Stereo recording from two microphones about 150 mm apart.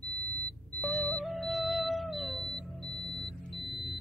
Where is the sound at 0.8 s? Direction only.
Centre (ahead or behind).